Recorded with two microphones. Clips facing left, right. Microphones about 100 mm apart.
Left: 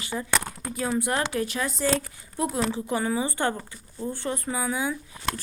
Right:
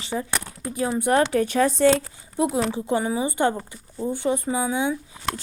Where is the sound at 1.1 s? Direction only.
40° right (ahead or behind).